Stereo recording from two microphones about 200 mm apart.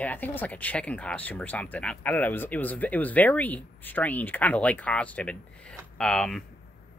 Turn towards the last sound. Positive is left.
turn(degrees=5)  # may be behind; listen again after turning